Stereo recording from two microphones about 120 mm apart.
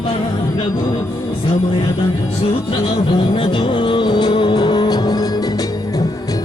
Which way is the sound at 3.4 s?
40° left (ahead or behind).